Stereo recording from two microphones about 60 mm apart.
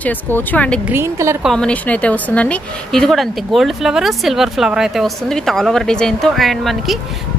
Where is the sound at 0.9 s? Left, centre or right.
Right.